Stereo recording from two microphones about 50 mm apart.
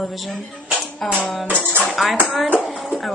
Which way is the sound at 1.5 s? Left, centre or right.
Left.